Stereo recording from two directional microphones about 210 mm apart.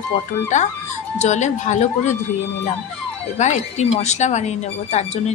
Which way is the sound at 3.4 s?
35° left (ahead or behind).